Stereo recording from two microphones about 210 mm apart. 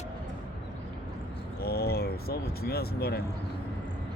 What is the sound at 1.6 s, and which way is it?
Vehicle, 50° left (ahead or behind).